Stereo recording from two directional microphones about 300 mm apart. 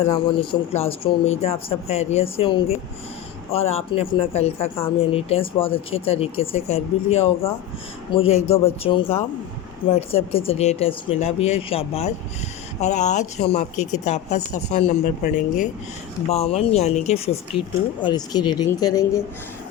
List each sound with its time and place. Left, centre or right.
0.1 s speech: centre